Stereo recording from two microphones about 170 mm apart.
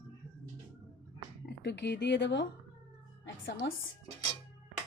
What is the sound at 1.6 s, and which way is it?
Speech, 90° left.